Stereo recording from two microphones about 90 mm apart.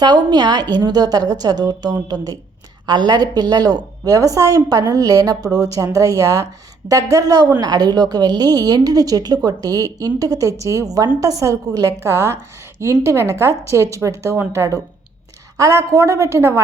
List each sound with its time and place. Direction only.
0.0 s a woman's voice: 50° right (ahead or behind); by 16.6 s 30° right (ahead or behind)